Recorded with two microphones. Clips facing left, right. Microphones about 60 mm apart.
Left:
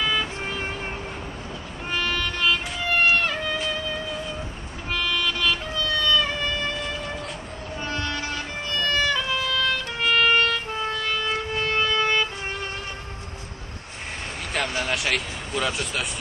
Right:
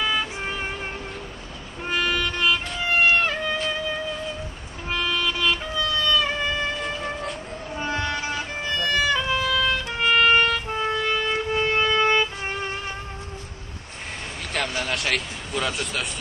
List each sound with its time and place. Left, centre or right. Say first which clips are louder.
0.0 s music: even; centre
2.8 s run: right 1 dB; centre
4.8 s music: right 1 dB; centre
6.0 s music: even; right
7.8 s music: right 3 dB; right
14.7 s vehicle: left 1 dB; centre